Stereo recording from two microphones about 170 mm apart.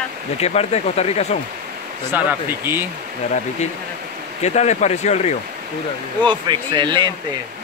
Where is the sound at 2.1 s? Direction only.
10° right (ahead or behind).